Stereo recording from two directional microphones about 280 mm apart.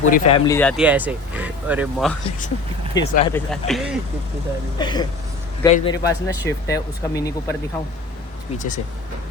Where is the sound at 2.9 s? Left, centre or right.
Centre.